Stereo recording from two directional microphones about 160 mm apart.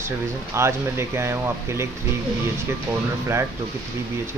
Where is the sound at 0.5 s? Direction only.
15° right (ahead or behind).